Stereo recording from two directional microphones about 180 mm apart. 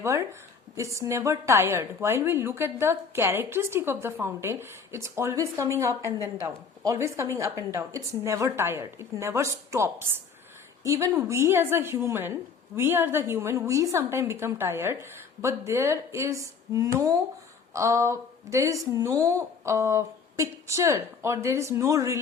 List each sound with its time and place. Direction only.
0.0 s a woman's voice: 15° right (ahead or behind)